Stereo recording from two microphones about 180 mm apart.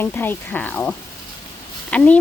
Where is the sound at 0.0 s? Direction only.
10° left (ahead or behind).